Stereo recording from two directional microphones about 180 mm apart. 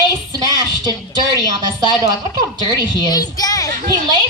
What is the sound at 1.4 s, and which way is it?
A woman's voice, 25° right (ahead or behind).